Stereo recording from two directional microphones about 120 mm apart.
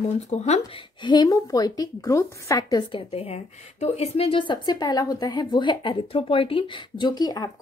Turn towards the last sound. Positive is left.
turn(degrees=35)  # may be behind; listen again after turning